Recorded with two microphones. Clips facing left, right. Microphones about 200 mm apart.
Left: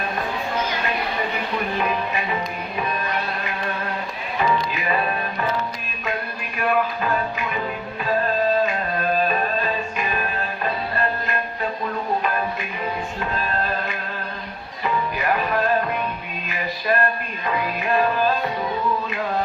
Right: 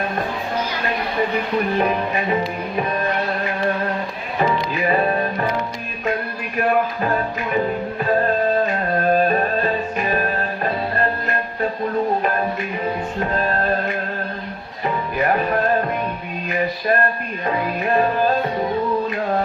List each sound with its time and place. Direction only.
1.8 s music: 45° right (ahead or behind)
4.7 s music: 35° right (ahead or behind)
6.6 s music: 40° right (ahead or behind)
9.0 s music: 50° right (ahead or behind)
13.1 s music: 35° right (ahead or behind)